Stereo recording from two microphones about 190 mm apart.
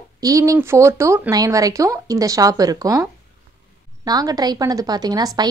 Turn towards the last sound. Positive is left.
turn(degrees=-20)  # may be behind; listen again after turning